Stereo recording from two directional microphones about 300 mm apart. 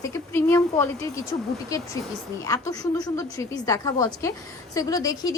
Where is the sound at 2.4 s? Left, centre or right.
Centre.